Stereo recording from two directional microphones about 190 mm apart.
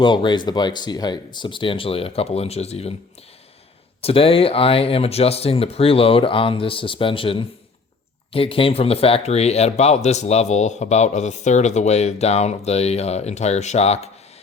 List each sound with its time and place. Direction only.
0.0 s speech: 25° left (ahead or behind)
4.0 s speech: 30° left (ahead or behind)